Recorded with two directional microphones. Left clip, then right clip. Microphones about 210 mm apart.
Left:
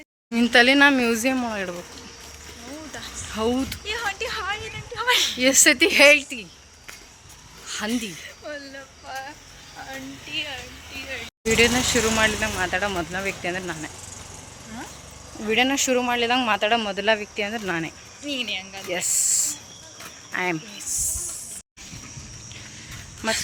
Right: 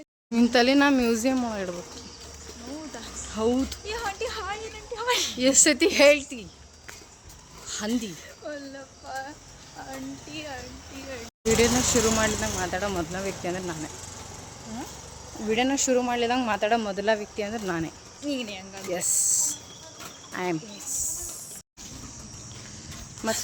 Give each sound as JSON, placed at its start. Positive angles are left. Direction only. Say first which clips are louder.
{"t": 0.3, "sound": "speech", "louder": "left 5 dB", "side_deg": 0}
{"t": 3.3, "sound": "a child's voice", "louder": "left 1 dB", "side_deg": 5}
{"t": 3.8, "sound": "a woman's voice", "louder": "left 4 dB", "side_deg": -20}
{"t": 5.4, "sound": "speech", "louder": "left 2 dB", "side_deg": 10}
{"t": 7.7, "sound": "a sound", "louder": "left 3 dB", "side_deg": 10}
{"t": 8.4, "sound": "speech", "louder": "left 1 dB", "side_deg": -25}
{"t": 10.3, "sound": "speech", "louder": "left 8 dB", "side_deg": -30}
{"t": 11.4, "sound": "speech", "louder": "left 3 dB", "side_deg": 0}
{"t": 15.4, "sound": "speech", "louder": "left 4 dB", "side_deg": 10}
{"t": 18.3, "sound": "speech", "louder": "left 5 dB", "side_deg": -30}
{"t": 18.9, "sound": "speech", "louder": "left 2 dB", "side_deg": 5}
{"t": 20.8, "sound": "snake", "louder": "left 6 dB", "side_deg": -30}
{"t": 23.2, "sound": "speech", "louder": "left 4 dB", "side_deg": 0}